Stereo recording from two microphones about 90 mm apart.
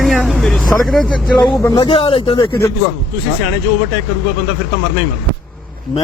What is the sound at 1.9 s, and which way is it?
Speech, 80° left.